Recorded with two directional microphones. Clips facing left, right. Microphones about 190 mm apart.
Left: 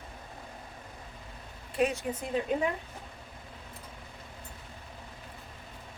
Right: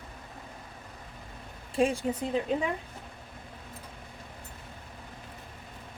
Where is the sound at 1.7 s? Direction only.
30° right (ahead or behind).